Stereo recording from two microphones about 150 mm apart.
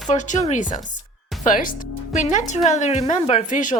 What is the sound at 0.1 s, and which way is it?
A woman's voice, 50° left (ahead or behind).